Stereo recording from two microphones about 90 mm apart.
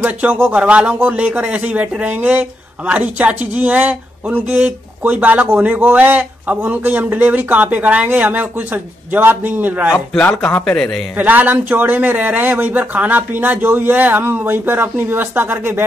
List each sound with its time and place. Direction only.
0.0 s speech: 20° right (ahead or behind)
9.9 s speech: 20° left (ahead or behind)
11.1 s speech: 20° right (ahead or behind)